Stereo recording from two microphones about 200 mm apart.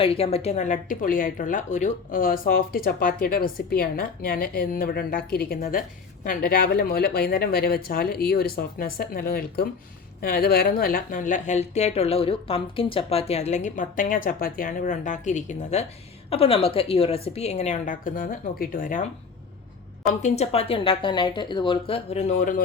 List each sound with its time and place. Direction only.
0.0 s a woman's voice: 30° left (ahead or behind)
20.2 s speech: 35° left (ahead or behind)